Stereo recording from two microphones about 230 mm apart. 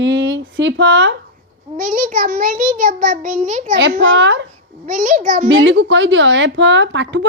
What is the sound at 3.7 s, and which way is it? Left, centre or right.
Speech, right.